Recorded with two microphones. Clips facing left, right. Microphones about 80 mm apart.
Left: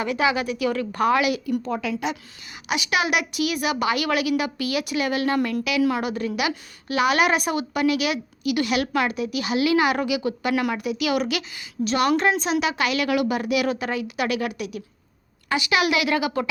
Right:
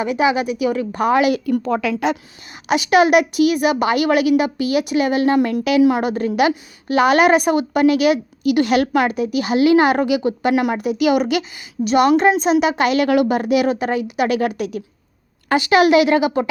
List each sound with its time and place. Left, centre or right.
0.0 s a woman's voice: right
1.5 s a woman's voice: right
1.7 s a woman's voice: right
2.6 s a woman's voice: right